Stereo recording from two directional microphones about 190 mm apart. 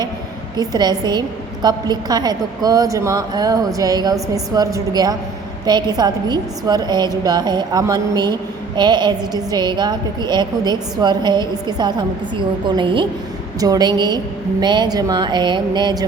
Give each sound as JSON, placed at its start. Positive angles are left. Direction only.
{"t": 0.5, "sound": "a woman's voice", "side_deg": -20}